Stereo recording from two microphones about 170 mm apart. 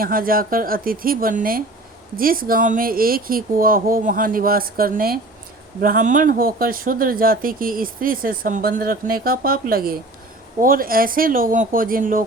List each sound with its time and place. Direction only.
0.0 s speech: 55° right (ahead or behind)